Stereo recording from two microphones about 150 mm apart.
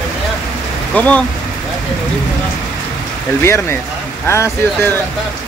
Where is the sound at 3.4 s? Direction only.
15° left (ahead or behind).